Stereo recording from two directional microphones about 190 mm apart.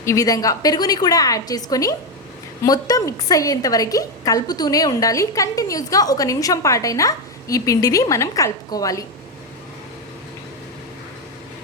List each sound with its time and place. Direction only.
0.0 s a woman's voice: 15° left (ahead or behind)